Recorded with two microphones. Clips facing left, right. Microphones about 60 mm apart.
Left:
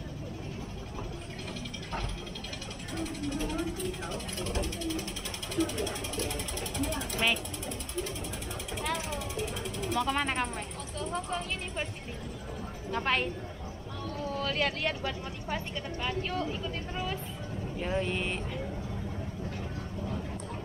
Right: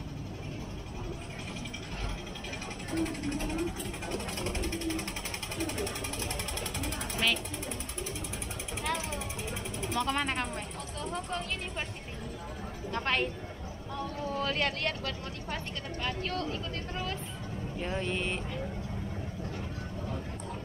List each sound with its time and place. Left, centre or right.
2.9 s speech: right
4.4 s a sound: right
5.6 s speech: right
6.6 s speech: right
8.9 s speech: right
9.9 s speech: centre
12.9 s speech: centre